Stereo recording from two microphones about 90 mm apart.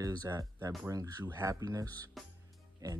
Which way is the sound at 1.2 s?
30° right (ahead or behind).